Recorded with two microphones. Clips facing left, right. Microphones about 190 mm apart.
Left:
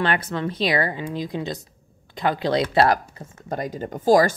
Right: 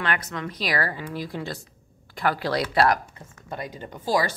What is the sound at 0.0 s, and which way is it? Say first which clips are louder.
A woman's voice: left 5 dB; 30° left (ahead or behind).